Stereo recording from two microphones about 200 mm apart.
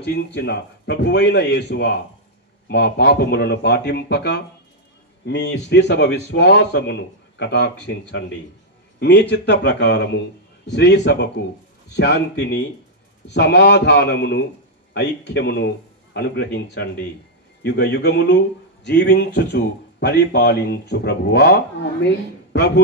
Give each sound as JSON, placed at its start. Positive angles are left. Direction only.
{"t": 0.0, "sound": "a man's voice", "side_deg": 55}